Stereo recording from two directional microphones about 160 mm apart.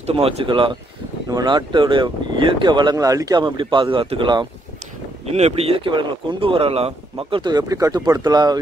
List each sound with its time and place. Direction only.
0.0 s speech: 40° right (ahead or behind)
5.2 s speech: 40° right (ahead or behind); by 8.5 s 25° right (ahead or behind)